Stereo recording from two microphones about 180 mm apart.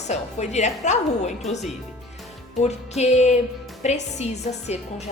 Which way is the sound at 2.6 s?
35° left (ahead or behind).